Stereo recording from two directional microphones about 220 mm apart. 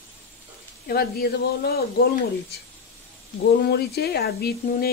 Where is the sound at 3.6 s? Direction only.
45° left (ahead or behind).